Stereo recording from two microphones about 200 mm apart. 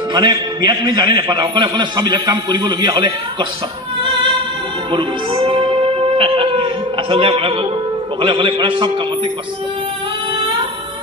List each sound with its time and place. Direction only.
0.1 s a man's voice: 20° right (ahead or behind)
4.9 s music: 25° right (ahead or behind)
6.1 s a sound: 25° right (ahead or behind)
8.2 s a man's voice: 25° right (ahead or behind)